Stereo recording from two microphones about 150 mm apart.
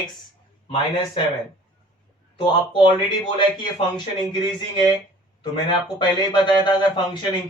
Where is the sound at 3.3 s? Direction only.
30° left (ahead or behind).